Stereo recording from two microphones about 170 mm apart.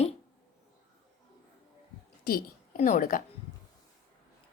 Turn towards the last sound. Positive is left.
turn(degrees=55)  # may be behind; listen again after turning